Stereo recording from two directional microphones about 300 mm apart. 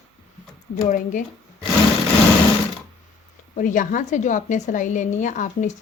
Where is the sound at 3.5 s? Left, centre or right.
Left.